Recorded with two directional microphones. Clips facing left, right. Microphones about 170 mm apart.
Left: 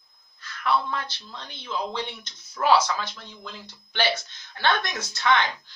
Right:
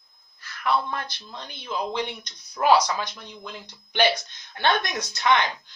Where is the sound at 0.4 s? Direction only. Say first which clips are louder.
Even; 10° right (ahead or behind).